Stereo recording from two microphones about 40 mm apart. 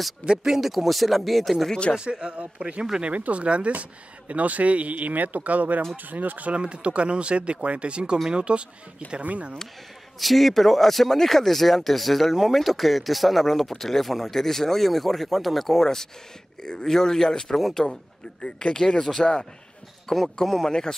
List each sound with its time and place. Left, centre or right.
0.3 s speech: centre
1.7 s speech: left
2.0 s speech: right
2.3 s speech: right
6.5 s speech: right
9.2 s speech: right
10.1 s speech: centre
17.6 s speech: centre
18.4 s speech: left; by 20.6 s centre
20.6 s speech: centre